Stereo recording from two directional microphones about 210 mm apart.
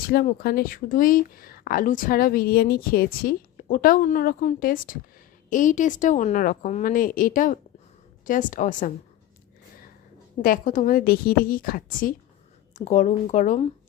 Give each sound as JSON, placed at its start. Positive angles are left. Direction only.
{"t": 0.1, "sound": "a woman's voice", "side_deg": 45}
{"t": 10.4, "sound": "a woman's voice", "side_deg": 40}